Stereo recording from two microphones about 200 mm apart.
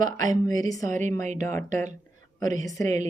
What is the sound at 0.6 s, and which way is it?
Speech, 15° left (ahead or behind).